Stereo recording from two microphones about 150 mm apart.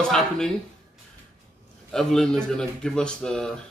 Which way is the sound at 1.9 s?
5° left (ahead or behind).